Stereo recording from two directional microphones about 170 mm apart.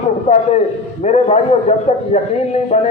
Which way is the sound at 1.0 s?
40° left (ahead or behind).